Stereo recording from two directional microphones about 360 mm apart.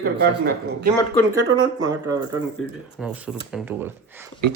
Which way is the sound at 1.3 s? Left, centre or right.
Centre.